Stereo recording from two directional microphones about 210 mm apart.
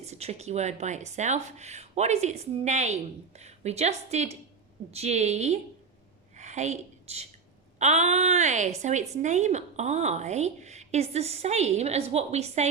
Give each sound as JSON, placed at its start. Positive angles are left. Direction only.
{"t": 0.0, "sound": "a woman's voice", "side_deg": -30}
{"t": 6.3, "sound": "a sound", "side_deg": -35}
{"t": 7.8, "sound": "a woman's voice", "side_deg": -30}